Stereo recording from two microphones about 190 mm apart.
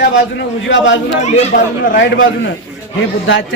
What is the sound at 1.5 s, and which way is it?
Speech, 55° left (ahead or behind).